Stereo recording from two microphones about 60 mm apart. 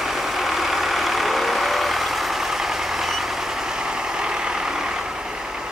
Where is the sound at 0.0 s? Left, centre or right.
Centre.